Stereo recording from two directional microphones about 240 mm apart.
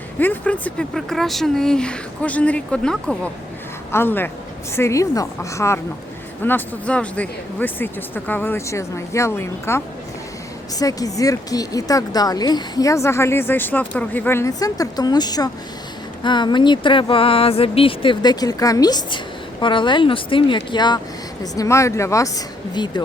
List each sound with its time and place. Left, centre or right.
0.2 s speech: centre